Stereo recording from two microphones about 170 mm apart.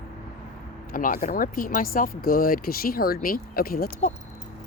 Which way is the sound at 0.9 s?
55° left (ahead or behind).